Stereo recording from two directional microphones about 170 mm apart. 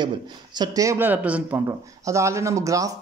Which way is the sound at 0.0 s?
25° right (ahead or behind).